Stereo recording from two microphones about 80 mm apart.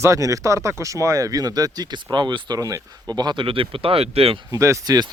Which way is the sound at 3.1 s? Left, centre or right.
Right.